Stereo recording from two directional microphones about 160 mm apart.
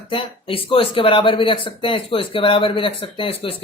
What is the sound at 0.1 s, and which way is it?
Speech, 35° left (ahead or behind).